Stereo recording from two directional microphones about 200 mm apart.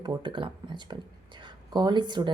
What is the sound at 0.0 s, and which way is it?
A woman's voice, 20° right (ahead or behind).